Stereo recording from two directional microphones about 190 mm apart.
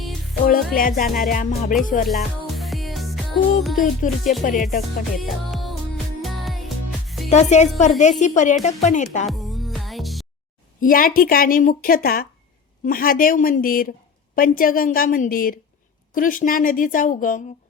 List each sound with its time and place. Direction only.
0.7 s a woman's voice: 45° left (ahead or behind)
2.0 s music: centre (ahead or behind)
4.0 s a woman's voice: 45° left (ahead or behind)
5.1 s music: centre (ahead or behind)
7.3 s speech: 35° left (ahead or behind)
9.3 s music: centre (ahead or behind)
10.8 s a woman's voice: 45° left (ahead or behind)